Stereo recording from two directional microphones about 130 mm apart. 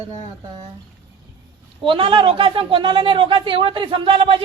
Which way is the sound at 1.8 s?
40° right (ahead or behind).